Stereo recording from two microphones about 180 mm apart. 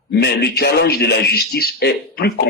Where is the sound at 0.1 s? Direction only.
65° left (ahead or behind).